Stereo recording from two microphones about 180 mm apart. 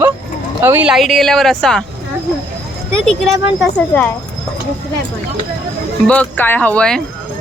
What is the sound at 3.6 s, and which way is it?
Speech, 5° left (ahead or behind).